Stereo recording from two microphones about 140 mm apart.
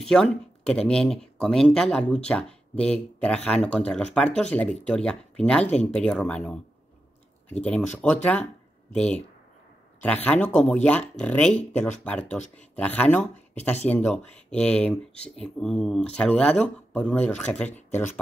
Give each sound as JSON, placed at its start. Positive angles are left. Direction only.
{"t": 0.0, "sound": "speech", "side_deg": 5}